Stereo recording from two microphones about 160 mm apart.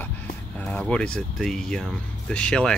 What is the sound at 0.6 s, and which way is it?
Speech, 5° left (ahead or behind).